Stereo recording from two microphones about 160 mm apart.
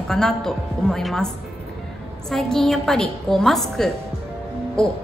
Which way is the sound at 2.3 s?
5° left (ahead or behind).